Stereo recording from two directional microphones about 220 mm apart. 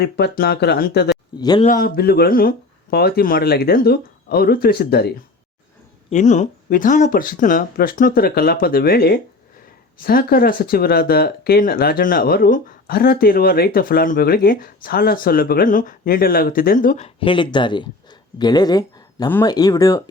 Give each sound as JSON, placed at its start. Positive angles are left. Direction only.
{"t": 0.0, "sound": "speech", "side_deg": 45}
{"t": 1.4, "sound": "speech", "side_deg": 20}
{"t": 1.6, "sound": "speech", "side_deg": 40}
{"t": 6.1, "sound": "speech", "side_deg": 35}
{"t": 17.2, "sound": "speech", "side_deg": 25}